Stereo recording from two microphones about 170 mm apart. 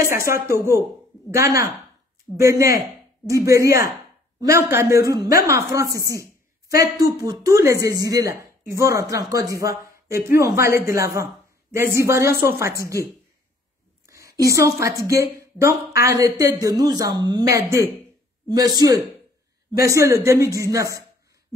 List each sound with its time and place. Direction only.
0.0 s speech: 15° right (ahead or behind)
14.0 s a woman's voice: 20° right (ahead or behind)